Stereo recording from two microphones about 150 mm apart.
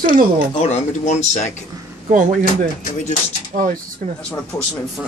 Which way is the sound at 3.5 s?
60° right (ahead or behind).